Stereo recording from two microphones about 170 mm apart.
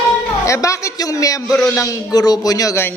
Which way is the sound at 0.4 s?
20° left (ahead or behind).